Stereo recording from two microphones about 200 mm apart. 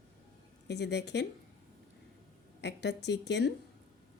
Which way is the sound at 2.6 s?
60° left (ahead or behind).